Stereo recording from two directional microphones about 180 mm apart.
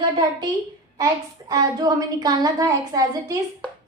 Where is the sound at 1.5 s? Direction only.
20° right (ahead or behind).